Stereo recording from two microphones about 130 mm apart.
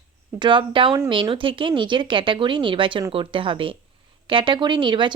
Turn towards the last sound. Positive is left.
turn(degrees=-35)  # may be behind; listen again after turning